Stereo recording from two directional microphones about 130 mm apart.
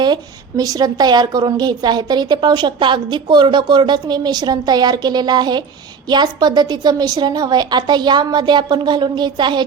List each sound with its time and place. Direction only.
0.0 s a woman's voice: 30° right (ahead or behind)